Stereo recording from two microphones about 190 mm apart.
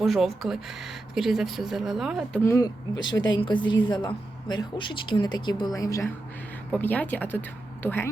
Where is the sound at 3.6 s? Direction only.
85° left.